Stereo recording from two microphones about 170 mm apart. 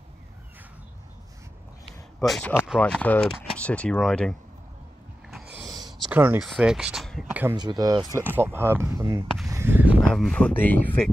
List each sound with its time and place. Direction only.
2.1 s speech: 5° left (ahead or behind)
5.7 s a sound: 25° right (ahead or behind)
6.1 s speech: 10° right (ahead or behind)
7.5 s speech: 25° right (ahead or behind)
8.3 s speech: 15° right (ahead or behind)
9.5 s a sound: 15° right (ahead or behind)
10.0 s speech: 5° left (ahead or behind)